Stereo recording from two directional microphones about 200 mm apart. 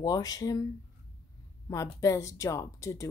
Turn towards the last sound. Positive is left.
turn(degrees=15)  # may be behind; listen again after turning